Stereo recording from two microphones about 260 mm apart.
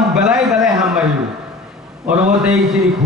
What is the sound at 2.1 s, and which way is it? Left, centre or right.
Speech, centre.